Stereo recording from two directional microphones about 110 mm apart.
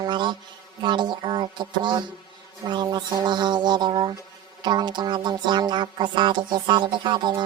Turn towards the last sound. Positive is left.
turn(degrees=-40)  # may be behind; listen again after turning